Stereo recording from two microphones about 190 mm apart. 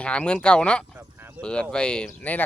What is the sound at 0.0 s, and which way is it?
Speech, 5° left (ahead or behind).